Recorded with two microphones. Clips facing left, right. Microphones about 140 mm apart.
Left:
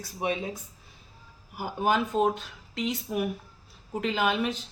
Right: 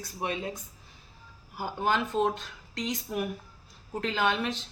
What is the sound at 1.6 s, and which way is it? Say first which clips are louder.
Speech: left 2 dB; 10° left (ahead or behind).